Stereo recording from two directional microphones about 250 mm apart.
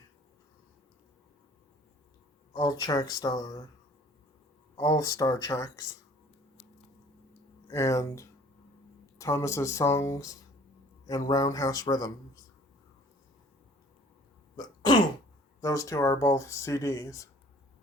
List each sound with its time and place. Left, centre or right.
2.5 s speech: centre
4.8 s speech: centre
7.7 s speech: centre
14.5 s throat clearing: centre
15.6 s speech: centre